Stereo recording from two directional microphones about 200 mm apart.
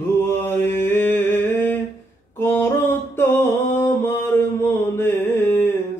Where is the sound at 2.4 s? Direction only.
10° left (ahead or behind).